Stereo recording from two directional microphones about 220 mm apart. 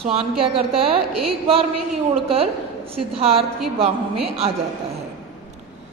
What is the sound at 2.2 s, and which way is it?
A woman's voice, 25° right (ahead or behind).